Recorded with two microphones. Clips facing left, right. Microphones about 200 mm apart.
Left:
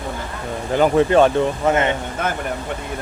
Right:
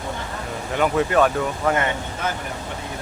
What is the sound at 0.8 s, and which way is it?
Speech, 30° left (ahead or behind).